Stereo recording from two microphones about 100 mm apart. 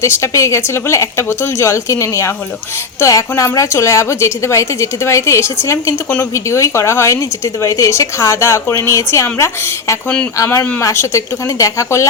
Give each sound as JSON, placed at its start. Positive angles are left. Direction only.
{"t": 0.0, "sound": "a woman's voice", "side_deg": 30}